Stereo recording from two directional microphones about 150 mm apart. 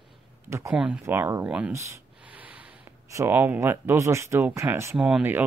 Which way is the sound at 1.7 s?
20° right (ahead or behind).